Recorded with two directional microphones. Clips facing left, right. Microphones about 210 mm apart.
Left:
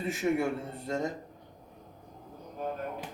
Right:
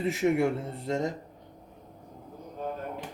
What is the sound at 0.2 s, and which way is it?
Speech, 35° right (ahead or behind).